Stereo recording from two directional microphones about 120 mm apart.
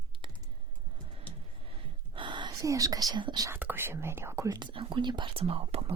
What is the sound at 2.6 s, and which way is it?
Speech, 30° right (ahead or behind).